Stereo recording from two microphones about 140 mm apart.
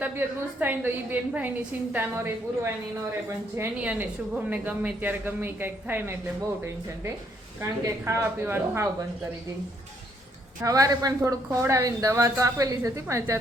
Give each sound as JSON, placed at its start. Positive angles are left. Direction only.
{"t": 0.0, "sound": "a woman's voice", "side_deg": -15}
{"t": 7.6, "sound": "a woman's voice", "side_deg": -20}
{"t": 10.6, "sound": "a woman's voice", "side_deg": -25}